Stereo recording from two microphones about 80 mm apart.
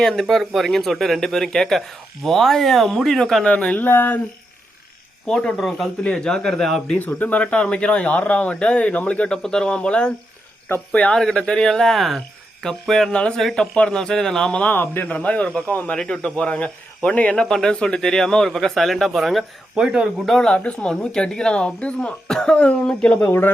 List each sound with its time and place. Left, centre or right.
0.0 s speech: centre
3.5 s speech: centre
5.2 s speech: centre
5.5 s speech: centre
6.0 s speech: centre
7.0 s speech: left
11.2 s speech: centre
14.7 s speech: left; by 20.1 s centre
20.2 s speech: centre
23.2 s speech: left